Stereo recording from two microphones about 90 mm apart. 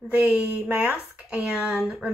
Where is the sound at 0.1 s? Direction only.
20° right (ahead or behind).